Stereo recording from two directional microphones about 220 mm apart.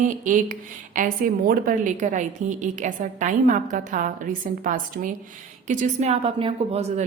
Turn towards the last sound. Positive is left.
turn(degrees=-30)  # may be behind; listen again after turning